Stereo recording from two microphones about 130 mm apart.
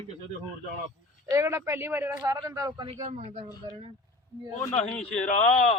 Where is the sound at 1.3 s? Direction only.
20° right (ahead or behind).